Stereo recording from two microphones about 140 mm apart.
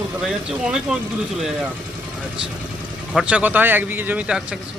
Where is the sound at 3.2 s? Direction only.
10° right (ahead or behind).